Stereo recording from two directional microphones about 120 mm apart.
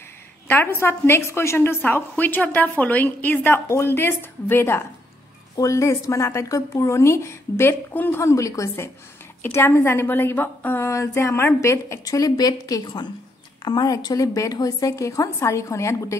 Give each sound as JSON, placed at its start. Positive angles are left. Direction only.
{"t": 0.5, "sound": "a woman's voice", "side_deg": 20}